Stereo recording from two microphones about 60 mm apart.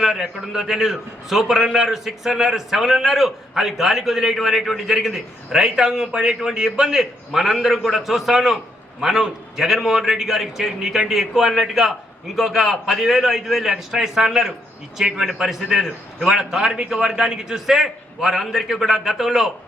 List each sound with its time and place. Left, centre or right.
0.0 s a man's voice: centre